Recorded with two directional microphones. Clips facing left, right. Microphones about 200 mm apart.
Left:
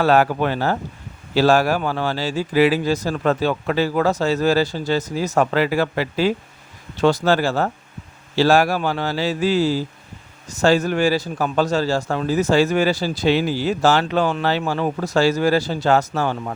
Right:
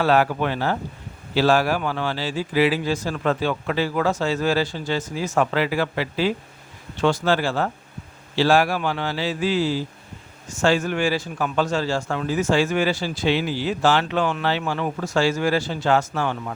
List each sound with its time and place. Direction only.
0.0 s speech: 45° left (ahead or behind)